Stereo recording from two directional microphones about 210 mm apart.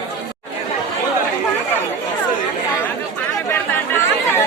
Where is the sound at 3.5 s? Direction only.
10° left (ahead or behind).